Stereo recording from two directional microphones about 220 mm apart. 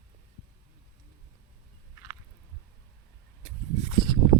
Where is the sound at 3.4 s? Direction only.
25° right (ahead or behind).